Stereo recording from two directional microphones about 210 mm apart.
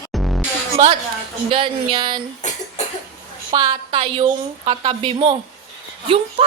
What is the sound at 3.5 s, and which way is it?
A woman's voice, 20° right (ahead or behind).